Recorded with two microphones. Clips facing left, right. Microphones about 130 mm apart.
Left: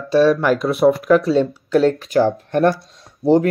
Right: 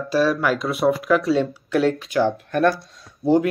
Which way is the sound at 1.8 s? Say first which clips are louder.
Left 3 dB; 35° left (ahead or behind).